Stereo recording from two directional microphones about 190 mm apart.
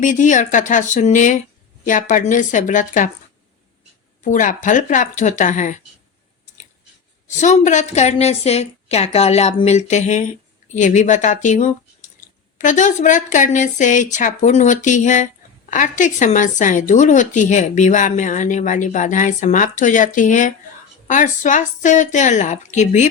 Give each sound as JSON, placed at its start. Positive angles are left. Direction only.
{"t": 0.0, "sound": "a woman's voice", "side_deg": 40}
{"t": 4.2, "sound": "a woman's voice", "side_deg": 40}
{"t": 7.3, "sound": "a woman's voice", "side_deg": 40}